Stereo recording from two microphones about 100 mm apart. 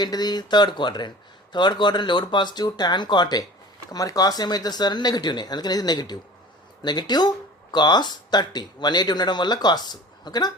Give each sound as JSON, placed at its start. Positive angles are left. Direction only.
{"t": 0.0, "sound": "speech", "side_deg": 45}